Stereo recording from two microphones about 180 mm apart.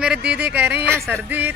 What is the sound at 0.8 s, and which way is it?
Speech, 5° left (ahead or behind).